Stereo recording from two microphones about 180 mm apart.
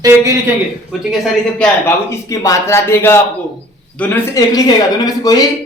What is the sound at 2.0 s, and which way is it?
Speech, 15° left (ahead or behind).